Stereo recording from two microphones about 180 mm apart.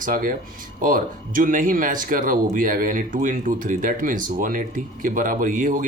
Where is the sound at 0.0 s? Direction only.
50° right (ahead or behind).